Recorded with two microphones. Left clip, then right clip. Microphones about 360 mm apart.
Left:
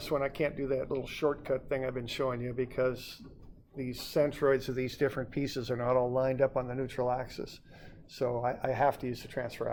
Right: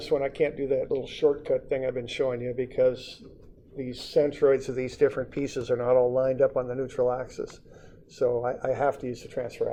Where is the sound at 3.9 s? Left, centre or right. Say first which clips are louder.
Right 3 dB; left.